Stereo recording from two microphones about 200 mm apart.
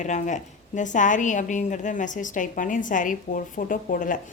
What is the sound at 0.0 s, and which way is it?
A woman's voice, 35° left (ahead or behind).